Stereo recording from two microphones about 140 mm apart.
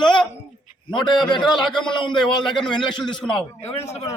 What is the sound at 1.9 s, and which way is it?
Speech, 35° left (ahead or behind).